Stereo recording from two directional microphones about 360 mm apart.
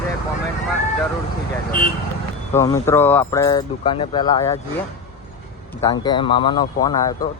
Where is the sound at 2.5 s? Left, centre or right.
Centre.